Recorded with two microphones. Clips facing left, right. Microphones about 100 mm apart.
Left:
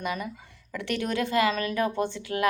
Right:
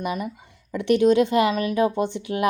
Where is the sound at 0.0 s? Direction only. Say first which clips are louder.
Right 4 dB; 20° right (ahead or behind).